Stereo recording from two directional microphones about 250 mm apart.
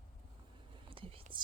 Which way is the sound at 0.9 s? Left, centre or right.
Right.